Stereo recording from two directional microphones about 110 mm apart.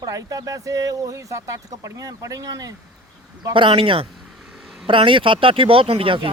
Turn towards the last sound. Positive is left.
turn(degrees=-55)  # may be behind; listen again after turning